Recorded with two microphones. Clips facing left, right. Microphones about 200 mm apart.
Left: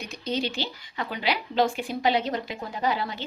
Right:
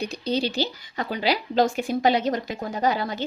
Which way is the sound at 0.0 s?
35° right (ahead or behind).